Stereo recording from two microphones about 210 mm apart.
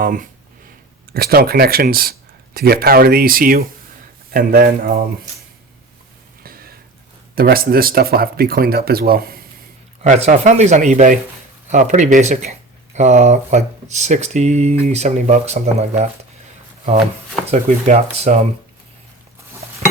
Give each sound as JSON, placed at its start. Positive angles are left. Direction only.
{"t": 0.0, "sound": "speech", "side_deg": -40}
{"t": 6.4, "sound": "a sound", "side_deg": -45}
{"t": 7.3, "sound": "speech", "side_deg": -45}
{"t": 10.0, "sound": "speech", "side_deg": -35}
{"t": 17.5, "sound": "speech", "side_deg": -35}